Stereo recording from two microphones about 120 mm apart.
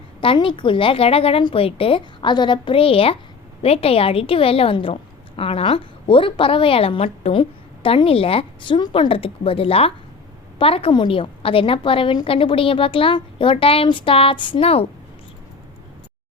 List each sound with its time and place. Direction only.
0.3 s a woman's voice: 45° left (ahead or behind)